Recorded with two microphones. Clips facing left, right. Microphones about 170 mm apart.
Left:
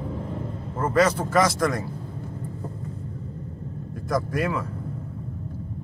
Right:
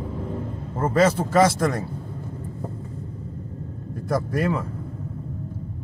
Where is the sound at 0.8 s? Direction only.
30° right (ahead or behind).